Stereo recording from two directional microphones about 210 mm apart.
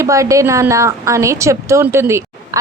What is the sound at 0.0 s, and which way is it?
A woman's voice, 15° right (ahead or behind).